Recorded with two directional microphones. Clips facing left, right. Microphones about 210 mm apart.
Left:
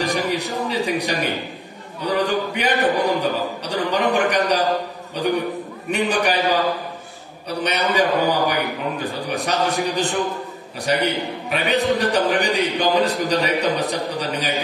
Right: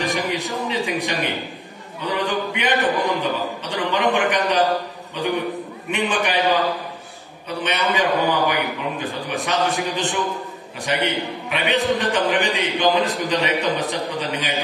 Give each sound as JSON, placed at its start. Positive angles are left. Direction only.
{"t": 0.0, "sound": "a sound", "side_deg": 40}
{"t": 2.0, "sound": "a man's voice", "side_deg": 40}
{"t": 5.9, "sound": "a man's voice", "side_deg": 40}